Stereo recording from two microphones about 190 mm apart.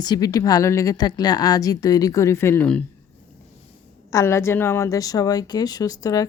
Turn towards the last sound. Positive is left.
turn(degrees=20)  # may be behind; listen again after turning